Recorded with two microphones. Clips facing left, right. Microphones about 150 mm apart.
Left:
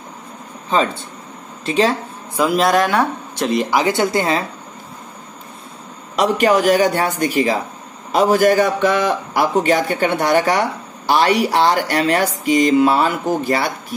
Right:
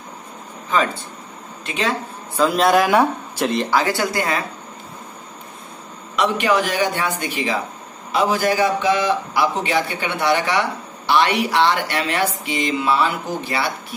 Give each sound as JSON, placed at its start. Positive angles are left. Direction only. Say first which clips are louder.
{"t": 0.7, "sound": "a woman's voice", "louder": "left 2 dB", "side_deg": 30}
{"t": 2.5, "sound": "speech", "louder": "even", "side_deg": 0}
{"t": 3.7, "sound": "a woman's voice", "louder": "left 3 dB", "side_deg": 20}
{"t": 6.1, "sound": "a man's voice", "louder": "left 4 dB", "side_deg": 40}